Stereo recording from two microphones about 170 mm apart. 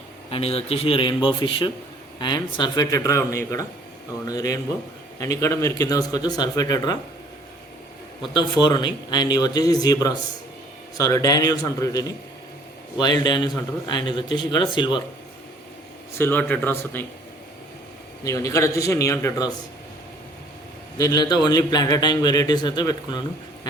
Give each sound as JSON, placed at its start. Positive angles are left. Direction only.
{"t": 0.3, "sound": "a man's voice", "side_deg": 35}
{"t": 8.3, "sound": "a man's voice", "side_deg": 25}
{"t": 16.1, "sound": "a man's voice", "side_deg": 15}
{"t": 18.3, "sound": "a man's voice", "side_deg": 20}
{"t": 21.0, "sound": "a man's voice", "side_deg": 20}